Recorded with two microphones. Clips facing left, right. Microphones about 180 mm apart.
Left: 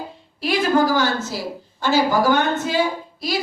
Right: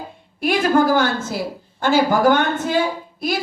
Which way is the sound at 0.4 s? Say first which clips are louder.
Right 2 dB; 55° right (ahead or behind).